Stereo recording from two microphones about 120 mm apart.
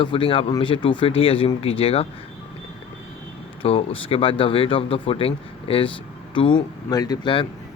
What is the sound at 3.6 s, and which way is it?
Speech, 50° left (ahead or behind).